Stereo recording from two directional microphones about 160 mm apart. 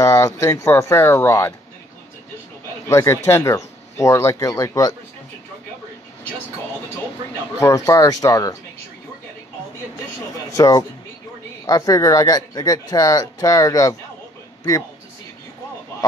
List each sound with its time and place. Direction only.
0.0 s speech: 20° left (ahead or behind)
2.9 s speech: 15° left (ahead or behind)
7.5 s speech: 20° left (ahead or behind)
10.5 s speech: 20° left (ahead or behind)